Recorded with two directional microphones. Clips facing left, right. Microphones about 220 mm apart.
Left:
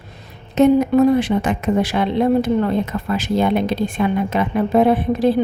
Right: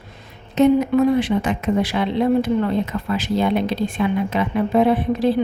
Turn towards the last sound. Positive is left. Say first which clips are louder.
# left 2 dB
turn(degrees=50)  # may be behind; listen again after turning